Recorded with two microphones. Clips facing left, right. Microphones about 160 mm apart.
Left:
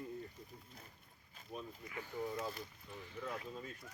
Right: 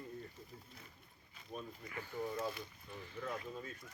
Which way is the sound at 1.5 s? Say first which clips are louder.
Even; centre (ahead or behind).